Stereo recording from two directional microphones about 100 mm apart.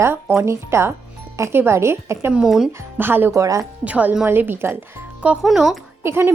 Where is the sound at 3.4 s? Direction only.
30° right (ahead or behind).